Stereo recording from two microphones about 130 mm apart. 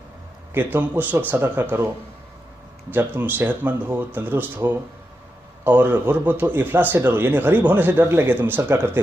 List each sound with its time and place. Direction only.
0.5 s a man's voice: 15° right (ahead or behind)
2.9 s a man's voice: 15° right (ahead or behind)